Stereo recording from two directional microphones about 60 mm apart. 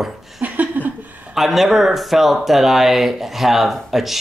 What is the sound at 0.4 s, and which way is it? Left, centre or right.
Laughter, right.